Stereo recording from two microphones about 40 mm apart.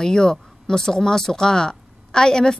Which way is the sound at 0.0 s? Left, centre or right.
Centre.